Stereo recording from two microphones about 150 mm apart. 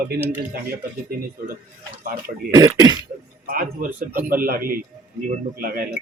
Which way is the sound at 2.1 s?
70° right (ahead or behind).